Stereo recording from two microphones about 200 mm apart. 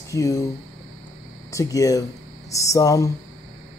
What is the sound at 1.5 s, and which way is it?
A man's voice, 15° left (ahead or behind).